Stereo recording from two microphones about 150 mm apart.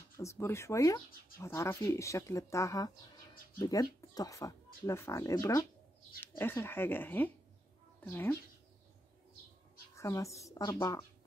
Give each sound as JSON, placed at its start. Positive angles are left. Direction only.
{"t": 0.2, "sound": "speech", "side_deg": 20}
{"t": 9.9, "sound": "speech", "side_deg": 20}